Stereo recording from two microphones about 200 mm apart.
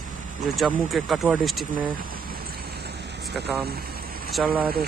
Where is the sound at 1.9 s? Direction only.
45° right (ahead or behind).